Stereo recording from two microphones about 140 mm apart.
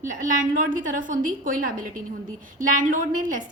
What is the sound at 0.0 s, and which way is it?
A woman's voice, 65° right (ahead or behind).